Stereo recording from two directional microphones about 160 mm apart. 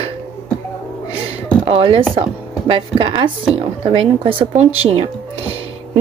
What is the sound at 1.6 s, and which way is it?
Speech, 35° right (ahead or behind).